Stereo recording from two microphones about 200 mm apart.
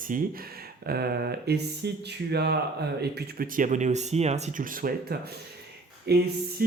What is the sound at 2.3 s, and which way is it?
Music, 55° right (ahead or behind).